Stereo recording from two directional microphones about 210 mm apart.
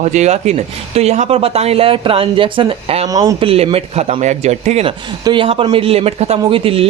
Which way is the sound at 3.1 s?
15° right (ahead or behind).